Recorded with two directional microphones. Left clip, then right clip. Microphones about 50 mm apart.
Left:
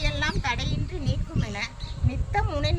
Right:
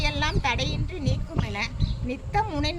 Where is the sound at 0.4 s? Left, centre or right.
Left.